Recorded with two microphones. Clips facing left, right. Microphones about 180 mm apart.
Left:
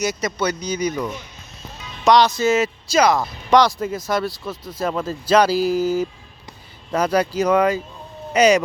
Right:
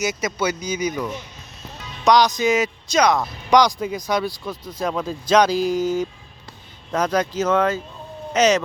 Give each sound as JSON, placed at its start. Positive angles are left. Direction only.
{"t": 0.0, "sound": "speech", "side_deg": 0}
{"t": 2.3, "sound": "speech", "side_deg": -15}
{"t": 2.6, "sound": "speech", "side_deg": 5}